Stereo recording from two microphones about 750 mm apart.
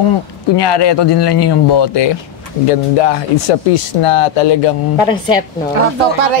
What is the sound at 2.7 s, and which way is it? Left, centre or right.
Speech, left.